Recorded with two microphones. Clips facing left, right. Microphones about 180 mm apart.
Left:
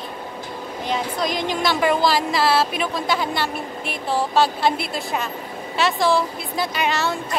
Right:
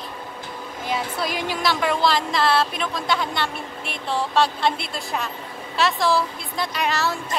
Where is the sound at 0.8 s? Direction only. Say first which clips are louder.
Left 2 dB; 5° right (ahead or behind).